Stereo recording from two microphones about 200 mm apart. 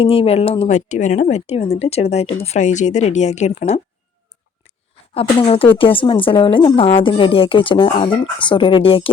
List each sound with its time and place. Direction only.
0.0 s speech: 30° left (ahead or behind)
5.1 s speech: 30° left (ahead or behind)